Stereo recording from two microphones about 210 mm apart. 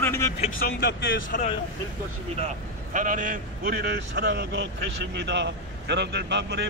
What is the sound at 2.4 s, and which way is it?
A man's voice, 40° right (ahead or behind).